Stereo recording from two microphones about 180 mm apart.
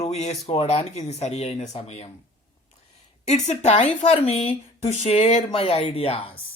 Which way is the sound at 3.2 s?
35° left (ahead or behind).